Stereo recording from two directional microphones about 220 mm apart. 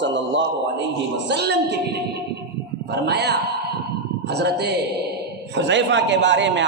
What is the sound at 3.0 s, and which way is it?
A woman's voice, 50° right (ahead or behind).